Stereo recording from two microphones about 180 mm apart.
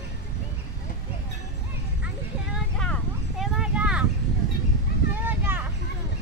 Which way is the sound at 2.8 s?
Centre (ahead or behind).